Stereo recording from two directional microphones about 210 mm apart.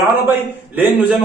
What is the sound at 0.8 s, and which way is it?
Speech, 10° right (ahead or behind).